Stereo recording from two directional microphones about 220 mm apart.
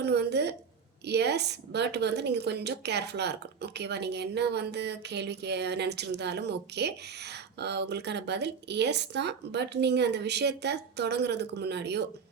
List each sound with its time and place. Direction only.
0.0 s a woman's voice: 50° right (ahead or behind)